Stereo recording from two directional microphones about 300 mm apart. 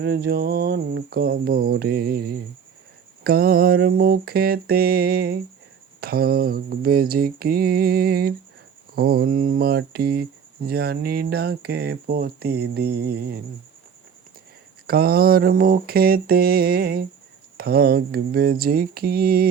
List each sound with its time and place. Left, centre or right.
0.0 s speech: right
14.8 s speech: right